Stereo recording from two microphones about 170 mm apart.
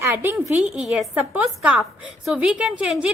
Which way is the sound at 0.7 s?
Centre (ahead or behind).